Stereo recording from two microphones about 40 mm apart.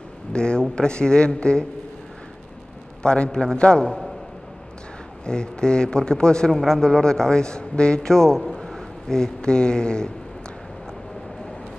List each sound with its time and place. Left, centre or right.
0.3 s speech: left
3.0 s speech: left
3.8 s a man's voice: centre
5.2 s a man's voice: left